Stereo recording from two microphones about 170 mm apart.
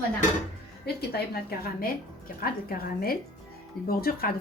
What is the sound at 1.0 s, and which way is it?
A woman's voice, 70° left (ahead or behind).